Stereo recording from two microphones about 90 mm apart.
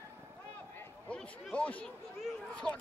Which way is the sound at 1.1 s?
15° left (ahead or behind).